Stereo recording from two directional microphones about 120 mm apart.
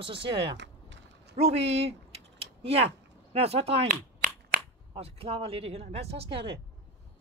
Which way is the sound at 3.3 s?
60° right (ahead or behind).